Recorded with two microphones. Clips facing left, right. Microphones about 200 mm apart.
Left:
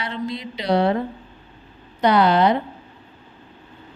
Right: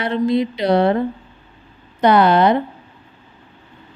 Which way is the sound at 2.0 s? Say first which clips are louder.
Right 3 dB; 55° right (ahead or behind).